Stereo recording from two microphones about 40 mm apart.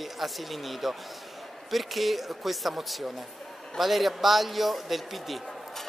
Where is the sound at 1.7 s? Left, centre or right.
Centre.